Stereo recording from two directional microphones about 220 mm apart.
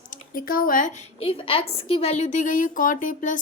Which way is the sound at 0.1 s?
40° left (ahead or behind).